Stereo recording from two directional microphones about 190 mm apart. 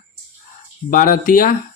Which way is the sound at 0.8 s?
45° left (ahead or behind).